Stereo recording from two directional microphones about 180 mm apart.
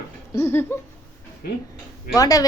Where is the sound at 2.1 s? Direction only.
20° left (ahead or behind).